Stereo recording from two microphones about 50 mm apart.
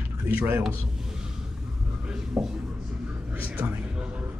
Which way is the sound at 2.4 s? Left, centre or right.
Centre.